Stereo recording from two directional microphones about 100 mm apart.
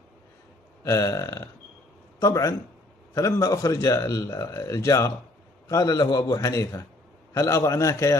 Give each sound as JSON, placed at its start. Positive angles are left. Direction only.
{"t": 0.8, "sound": "a man's voice", "side_deg": 30}